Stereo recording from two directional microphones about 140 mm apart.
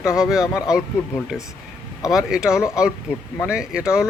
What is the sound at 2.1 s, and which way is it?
A man's voice, 5° right (ahead or behind).